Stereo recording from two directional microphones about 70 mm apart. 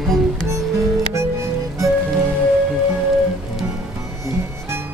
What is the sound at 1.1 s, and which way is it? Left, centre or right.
Music, right.